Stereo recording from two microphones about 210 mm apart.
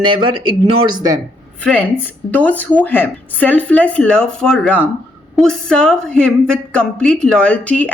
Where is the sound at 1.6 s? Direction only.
5° left (ahead or behind).